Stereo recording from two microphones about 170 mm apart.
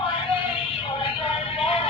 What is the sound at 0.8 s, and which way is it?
Music, 30° left (ahead or behind).